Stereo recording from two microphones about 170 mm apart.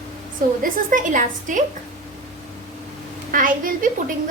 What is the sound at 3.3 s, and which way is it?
Speech, 55° right (ahead or behind).